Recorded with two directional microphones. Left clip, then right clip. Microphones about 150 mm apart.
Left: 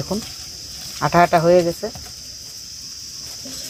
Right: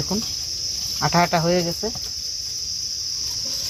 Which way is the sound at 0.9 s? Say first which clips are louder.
Left 5 dB; 75° left (ahead or behind).